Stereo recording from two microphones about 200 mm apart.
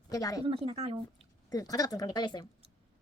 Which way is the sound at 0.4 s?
25° right (ahead or behind).